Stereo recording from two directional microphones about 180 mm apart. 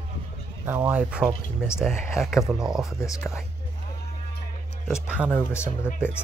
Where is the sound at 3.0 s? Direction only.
15° left (ahead or behind).